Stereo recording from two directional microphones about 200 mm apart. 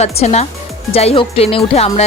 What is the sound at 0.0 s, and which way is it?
Speech, 35° left (ahead or behind).